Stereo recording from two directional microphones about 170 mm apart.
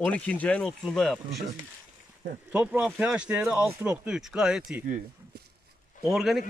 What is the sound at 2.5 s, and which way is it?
Speech, 5° right (ahead or behind).